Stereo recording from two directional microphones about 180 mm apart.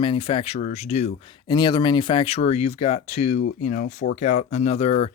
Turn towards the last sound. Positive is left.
turn(degrees=35)  # may be behind; listen again after turning